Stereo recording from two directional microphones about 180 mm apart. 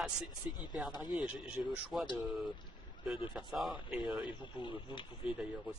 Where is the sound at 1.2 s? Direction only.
5° right (ahead or behind).